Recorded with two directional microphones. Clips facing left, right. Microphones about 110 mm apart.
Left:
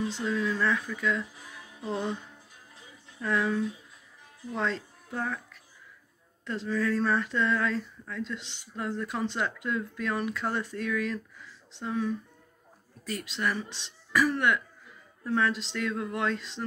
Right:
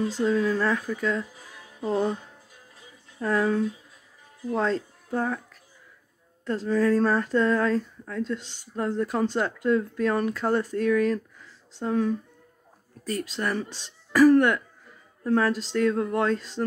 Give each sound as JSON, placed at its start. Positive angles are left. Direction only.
{"t": 0.1, "sound": "speech", "side_deg": -40}
{"t": 3.2, "sound": "speech", "side_deg": -40}